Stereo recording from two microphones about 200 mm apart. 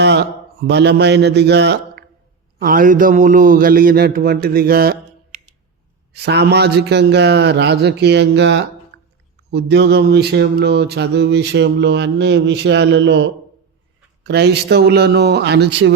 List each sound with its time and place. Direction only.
0.0 s a sound: 60° right (ahead or behind)
0.7 s mantra: 60° right (ahead or behind)
2.6 s mantra: 45° right (ahead or behind)
6.1 s mantra: 55° right (ahead or behind)
8.9 s a sound: 60° right (ahead or behind)
9.5 s mantra: 55° right (ahead or behind)